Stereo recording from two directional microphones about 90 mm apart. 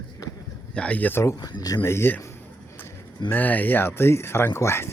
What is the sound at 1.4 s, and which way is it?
Speech, 50° left (ahead or behind).